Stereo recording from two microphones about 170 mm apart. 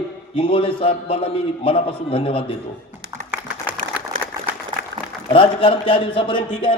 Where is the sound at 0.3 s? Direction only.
30° left (ahead or behind).